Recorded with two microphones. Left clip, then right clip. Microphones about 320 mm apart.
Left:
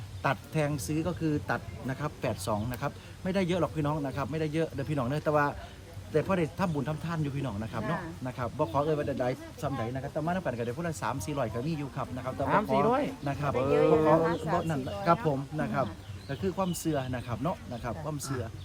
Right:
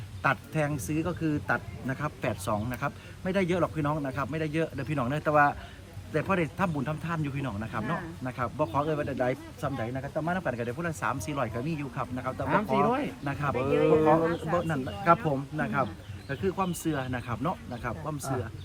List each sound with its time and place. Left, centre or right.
0.2 s a man's voice: centre
12.9 s speech: left
14.7 s speech: centre